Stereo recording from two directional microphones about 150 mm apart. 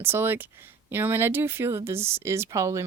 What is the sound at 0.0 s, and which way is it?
Speech, 15° right (ahead or behind).